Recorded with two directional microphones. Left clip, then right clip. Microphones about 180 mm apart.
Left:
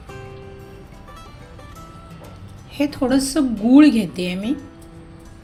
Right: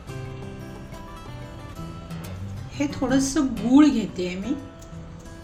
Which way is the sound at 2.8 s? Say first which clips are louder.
Left 4 dB; 40° left (ahead or behind).